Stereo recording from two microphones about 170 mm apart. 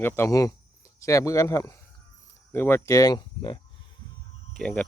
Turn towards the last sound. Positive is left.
turn(degrees=5)  # may be behind; listen again after turning